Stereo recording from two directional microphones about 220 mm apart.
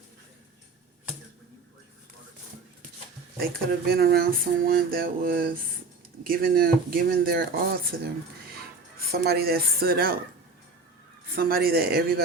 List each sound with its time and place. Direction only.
3.3 s speech: 45° right (ahead or behind)
9.1 s speech: 45° right (ahead or behind)
11.3 s speech: 45° right (ahead or behind)